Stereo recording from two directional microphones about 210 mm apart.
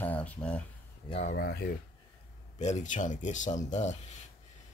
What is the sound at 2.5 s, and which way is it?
Speech, 35° left (ahead or behind).